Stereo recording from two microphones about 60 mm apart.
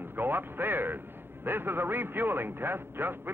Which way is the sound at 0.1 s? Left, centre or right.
Right.